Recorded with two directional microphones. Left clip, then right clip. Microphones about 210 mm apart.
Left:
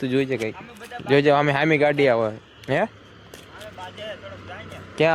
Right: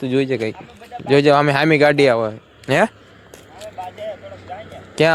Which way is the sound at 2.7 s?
25° right (ahead or behind).